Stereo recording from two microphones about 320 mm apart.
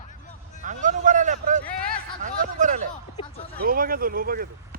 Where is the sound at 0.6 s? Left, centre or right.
Right.